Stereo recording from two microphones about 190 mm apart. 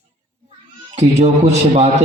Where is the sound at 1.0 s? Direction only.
35° right (ahead or behind).